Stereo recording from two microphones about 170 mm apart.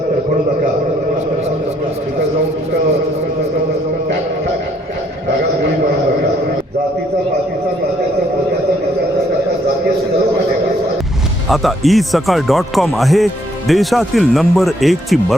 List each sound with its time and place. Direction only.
11.4 s speech: centre (ahead or behind)